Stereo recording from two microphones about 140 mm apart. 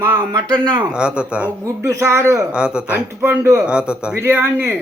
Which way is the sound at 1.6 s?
20° right (ahead or behind).